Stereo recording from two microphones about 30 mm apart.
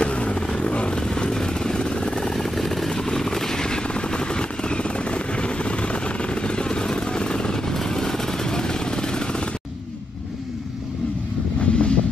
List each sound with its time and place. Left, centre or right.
0.0 s vehicle: left
2.5 s vehicle: centre
2.9 s vehicle: centre
11.6 s vehicle: left